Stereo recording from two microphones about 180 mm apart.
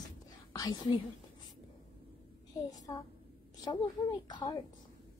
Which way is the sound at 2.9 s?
25° left (ahead or behind).